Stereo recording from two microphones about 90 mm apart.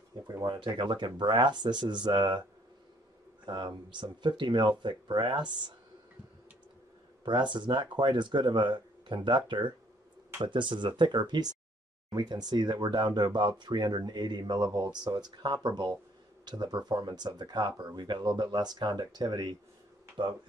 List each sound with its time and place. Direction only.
0.3 s a sound: 45° right (ahead or behind)
0.6 s speech: 65° right (ahead or behind)
3.4 s speech: 55° right (ahead or behind)
7.2 s speech: 60° right (ahead or behind)